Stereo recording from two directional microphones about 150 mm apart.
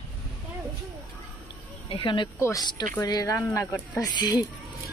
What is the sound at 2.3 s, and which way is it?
Speech, 20° left (ahead or behind).